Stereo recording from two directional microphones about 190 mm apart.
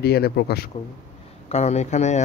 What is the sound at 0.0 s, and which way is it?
Speech, 55° left (ahead or behind).